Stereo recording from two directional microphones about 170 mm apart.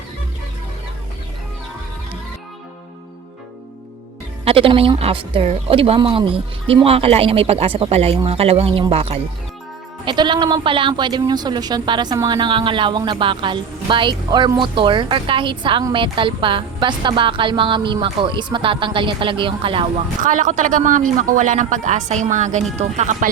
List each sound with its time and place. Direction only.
4.4 s a woman's voice: 30° right (ahead or behind)
20.2 s speech: 50° right (ahead or behind)